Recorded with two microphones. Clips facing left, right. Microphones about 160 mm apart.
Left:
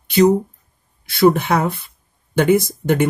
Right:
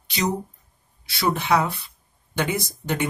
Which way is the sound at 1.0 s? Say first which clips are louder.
Left 9 dB; 55° left (ahead or behind).